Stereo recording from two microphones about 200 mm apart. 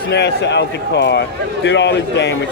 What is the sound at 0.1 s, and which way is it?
A man's voice, 60° left (ahead or behind).